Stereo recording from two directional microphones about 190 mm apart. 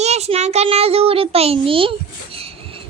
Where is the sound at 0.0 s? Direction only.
35° right (ahead or behind).